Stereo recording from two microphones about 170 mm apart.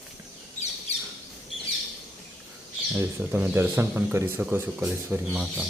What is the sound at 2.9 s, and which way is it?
Speech, 10° right (ahead or behind).